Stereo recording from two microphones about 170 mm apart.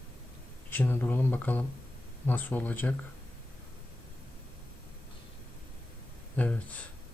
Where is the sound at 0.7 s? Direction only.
10° left (ahead or behind).